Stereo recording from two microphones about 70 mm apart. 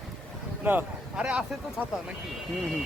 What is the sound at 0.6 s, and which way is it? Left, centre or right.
Speech, right.